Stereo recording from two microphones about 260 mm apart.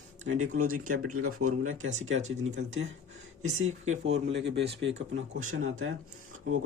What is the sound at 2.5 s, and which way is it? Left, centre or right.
Speech, right.